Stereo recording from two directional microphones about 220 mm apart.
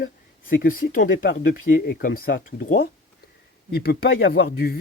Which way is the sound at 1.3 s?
50° left (ahead or behind).